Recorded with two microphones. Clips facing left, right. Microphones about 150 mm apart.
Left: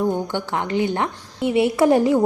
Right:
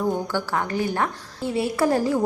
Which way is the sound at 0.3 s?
20° left (ahead or behind).